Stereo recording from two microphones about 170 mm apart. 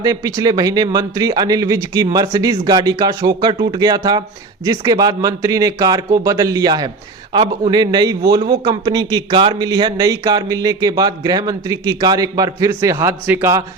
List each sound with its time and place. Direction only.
0.0 s a man's voice: 20° right (ahead or behind)